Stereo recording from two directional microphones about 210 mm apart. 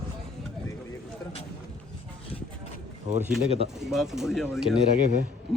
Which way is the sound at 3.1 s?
35° right (ahead or behind).